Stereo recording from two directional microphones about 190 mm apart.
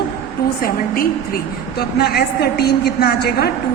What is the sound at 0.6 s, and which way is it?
A woman's voice, 50° left (ahead or behind).